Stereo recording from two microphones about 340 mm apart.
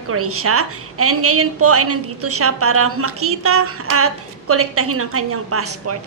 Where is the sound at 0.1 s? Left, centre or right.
Right.